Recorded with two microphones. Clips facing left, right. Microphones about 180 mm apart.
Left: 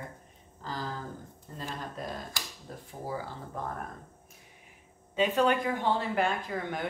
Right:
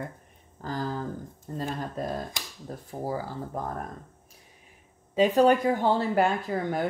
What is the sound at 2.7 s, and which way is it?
Speech, 40° right (ahead or behind).